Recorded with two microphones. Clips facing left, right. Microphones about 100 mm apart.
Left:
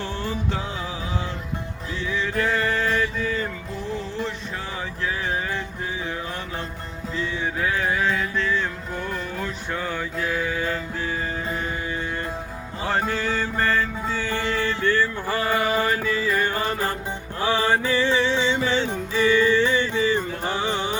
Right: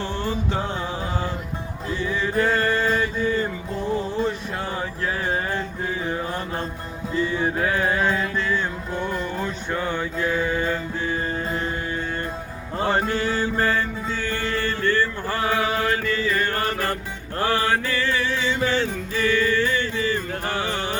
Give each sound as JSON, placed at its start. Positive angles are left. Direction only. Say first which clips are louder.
{"t": 0.0, "sound": "music", "louder": "right 2 dB", "side_deg": 0}
{"t": 1.9, "sound": "music", "louder": "right 2 dB", "side_deg": -5}
{"t": 2.5, "sound": "mantra", "louder": "right 2 dB", "side_deg": 0}
{"t": 5.0, "sound": "a sound", "louder": "right 1 dB", "side_deg": 0}
{"t": 7.1, "sound": "music", "louder": "right 5 dB", "side_deg": -5}
{"t": 12.9, "sound": "music", "louder": "even", "side_deg": 0}
{"t": 14.1, "sound": "music", "louder": "left 1 dB", "side_deg": 10}